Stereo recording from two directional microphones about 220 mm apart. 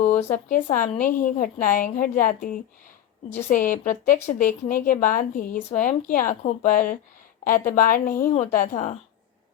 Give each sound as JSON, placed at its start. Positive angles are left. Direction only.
{"t": 0.0, "sound": "a woman's voice", "side_deg": 35}